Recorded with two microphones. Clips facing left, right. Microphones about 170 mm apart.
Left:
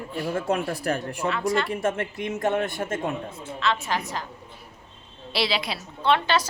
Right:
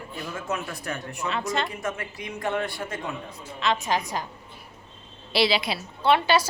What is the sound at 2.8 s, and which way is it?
Speech, 45° left (ahead or behind).